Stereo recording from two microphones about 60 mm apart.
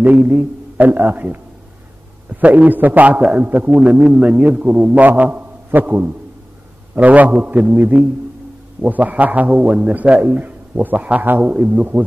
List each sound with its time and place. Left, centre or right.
0.0 s a man's voice: right
2.4 s a man's voice: right